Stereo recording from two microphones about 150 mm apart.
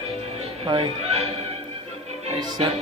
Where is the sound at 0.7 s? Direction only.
40° right (ahead or behind).